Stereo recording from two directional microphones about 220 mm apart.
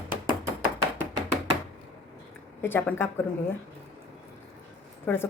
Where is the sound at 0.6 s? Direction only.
20° right (ahead or behind).